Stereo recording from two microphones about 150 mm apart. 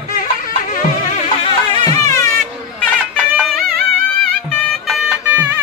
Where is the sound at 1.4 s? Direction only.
30° left (ahead or behind).